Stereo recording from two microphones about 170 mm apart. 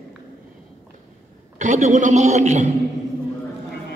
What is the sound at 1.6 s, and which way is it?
A man's voice, 45° right (ahead or behind).